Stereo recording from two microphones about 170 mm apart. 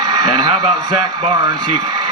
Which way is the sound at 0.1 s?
25° right (ahead or behind).